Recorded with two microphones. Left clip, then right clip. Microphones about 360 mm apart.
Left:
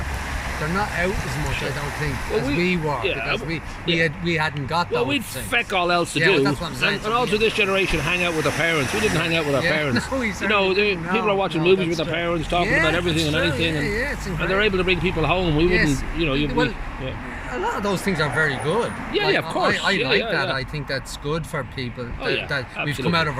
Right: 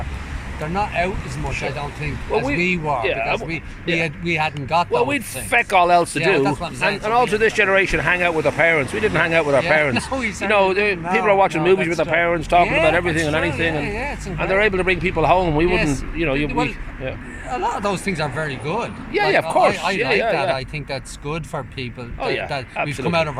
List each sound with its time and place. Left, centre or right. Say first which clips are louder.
0.8 s speech: right 3 dB; centre
2.5 s speech: right 2 dB; centre
15.4 s speech: right 2 dB; right
15.8 s speech: even; centre
17.5 s speech: right 3 dB; centre
22.2 s speech: right 2 dB; right
22.9 s speech: right 1 dB; centre